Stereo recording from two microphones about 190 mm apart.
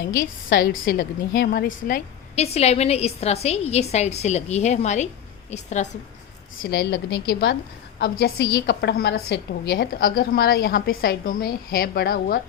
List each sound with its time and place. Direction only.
0.2 s a woman's voice: 50° left (ahead or behind)
6.6 s a woman's voice: 60° left (ahead or behind)
8.5 s a woman's voice: 60° left (ahead or behind)